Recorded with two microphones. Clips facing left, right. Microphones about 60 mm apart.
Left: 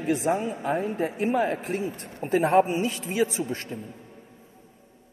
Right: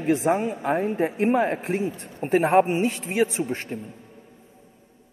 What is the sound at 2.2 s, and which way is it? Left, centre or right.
A man's voice, right.